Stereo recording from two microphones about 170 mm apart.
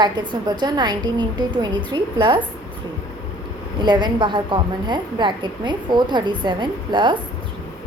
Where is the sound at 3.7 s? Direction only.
25° right (ahead or behind).